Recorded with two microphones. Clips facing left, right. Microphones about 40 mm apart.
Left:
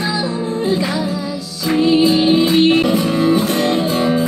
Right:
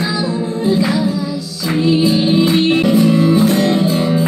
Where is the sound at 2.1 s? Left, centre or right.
Left.